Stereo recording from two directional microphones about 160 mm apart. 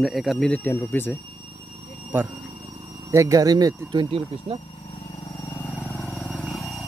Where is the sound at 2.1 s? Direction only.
15° right (ahead or behind).